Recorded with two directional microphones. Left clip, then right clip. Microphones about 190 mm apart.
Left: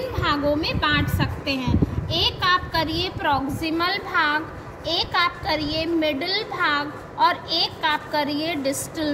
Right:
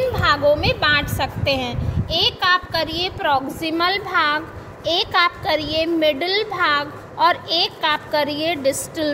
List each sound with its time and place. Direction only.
0.1 s a woman's voice: 40° right (ahead or behind)